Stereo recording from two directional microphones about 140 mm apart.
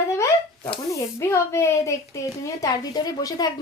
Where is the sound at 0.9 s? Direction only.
20° left (ahead or behind).